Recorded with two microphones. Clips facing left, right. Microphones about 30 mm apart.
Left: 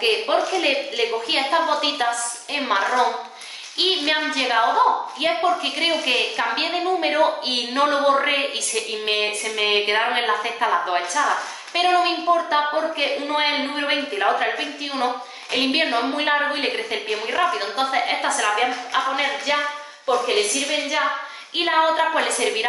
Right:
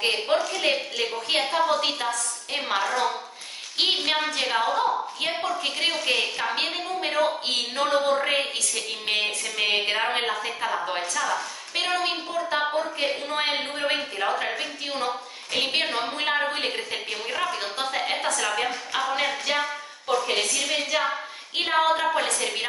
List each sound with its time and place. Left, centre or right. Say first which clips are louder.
0.0 s a woman's voice: left 4 dB; centre